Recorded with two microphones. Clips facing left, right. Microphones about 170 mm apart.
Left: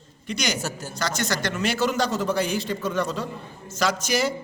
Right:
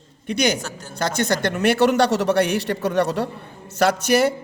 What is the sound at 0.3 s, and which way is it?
A man's voice, 55° right (ahead or behind).